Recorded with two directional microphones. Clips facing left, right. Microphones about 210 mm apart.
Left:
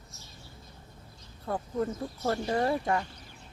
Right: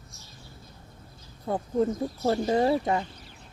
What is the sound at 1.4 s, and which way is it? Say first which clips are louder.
Speech: right 5 dB; 25° right (ahead or behind).